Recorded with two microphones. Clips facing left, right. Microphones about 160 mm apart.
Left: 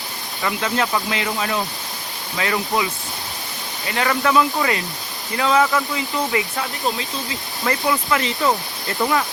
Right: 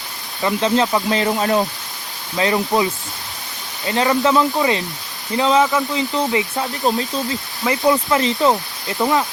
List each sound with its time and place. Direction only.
0.4 s speech: 25° right (ahead or behind)
3.8 s speech: 25° right (ahead or behind)
6.8 s speech: 40° right (ahead or behind)
8.9 s speech: 15° right (ahead or behind)